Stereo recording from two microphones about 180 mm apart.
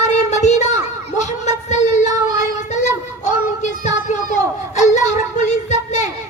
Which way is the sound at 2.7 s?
40° left (ahead or behind).